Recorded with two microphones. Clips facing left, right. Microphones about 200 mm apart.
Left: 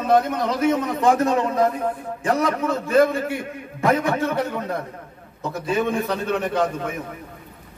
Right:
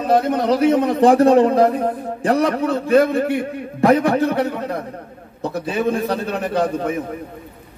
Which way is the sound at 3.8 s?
35° right (ahead or behind).